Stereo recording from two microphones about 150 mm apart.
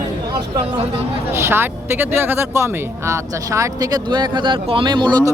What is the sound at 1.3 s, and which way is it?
Speech, 15° right (ahead or behind).